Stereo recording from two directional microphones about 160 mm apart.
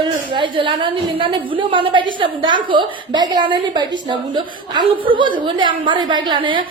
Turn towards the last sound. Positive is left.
turn(degrees=-30)  # may be behind; listen again after turning